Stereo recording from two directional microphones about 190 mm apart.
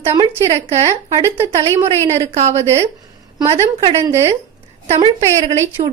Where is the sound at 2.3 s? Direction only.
35° right (ahead or behind).